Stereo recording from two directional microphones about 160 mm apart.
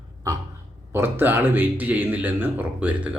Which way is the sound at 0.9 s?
15° right (ahead or behind).